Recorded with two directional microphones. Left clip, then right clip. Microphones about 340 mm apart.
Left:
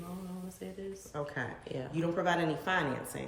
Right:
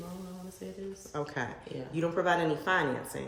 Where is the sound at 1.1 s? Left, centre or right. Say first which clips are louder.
Right 3 dB; right.